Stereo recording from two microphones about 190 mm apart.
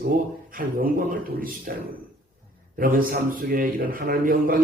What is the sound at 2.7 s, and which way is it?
Speech, 50° right (ahead or behind).